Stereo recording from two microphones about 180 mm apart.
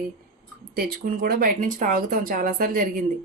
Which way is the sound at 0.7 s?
50° right (ahead or behind).